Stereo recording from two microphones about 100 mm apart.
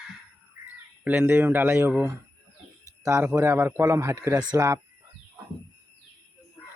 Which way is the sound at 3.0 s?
25° right (ahead or behind).